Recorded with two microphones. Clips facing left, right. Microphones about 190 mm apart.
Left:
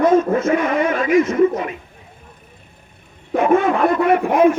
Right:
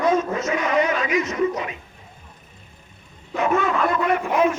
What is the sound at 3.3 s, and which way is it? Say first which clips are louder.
A man's voice: left 6 dB; 55° left (ahead or behind).